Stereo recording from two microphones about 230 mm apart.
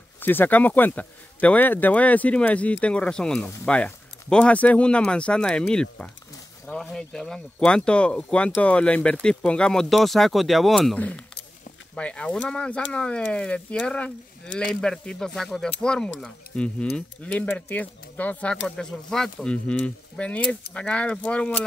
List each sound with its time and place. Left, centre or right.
0.2 s speech: centre